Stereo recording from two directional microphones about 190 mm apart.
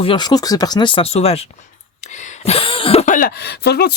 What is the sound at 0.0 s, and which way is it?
Speech, 25° left (ahead or behind).